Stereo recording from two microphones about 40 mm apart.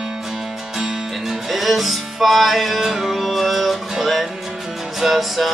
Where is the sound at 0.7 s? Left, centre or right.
Centre.